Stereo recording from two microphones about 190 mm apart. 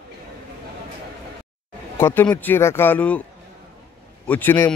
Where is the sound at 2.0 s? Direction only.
10° left (ahead or behind).